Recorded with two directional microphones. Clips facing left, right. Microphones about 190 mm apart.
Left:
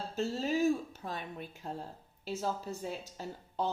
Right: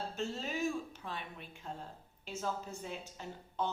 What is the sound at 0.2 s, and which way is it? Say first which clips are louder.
A woman's voice: left 7 dB; 35° left (ahead or behind).